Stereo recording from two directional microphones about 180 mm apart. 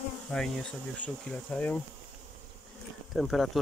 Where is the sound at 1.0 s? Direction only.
5° left (ahead or behind).